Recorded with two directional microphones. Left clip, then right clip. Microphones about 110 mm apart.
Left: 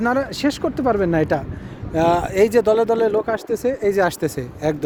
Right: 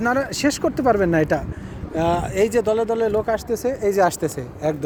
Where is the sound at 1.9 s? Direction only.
65° left (ahead or behind).